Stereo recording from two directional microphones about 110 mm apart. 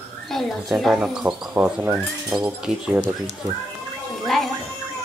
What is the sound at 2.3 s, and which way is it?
Speech, 5° right (ahead or behind).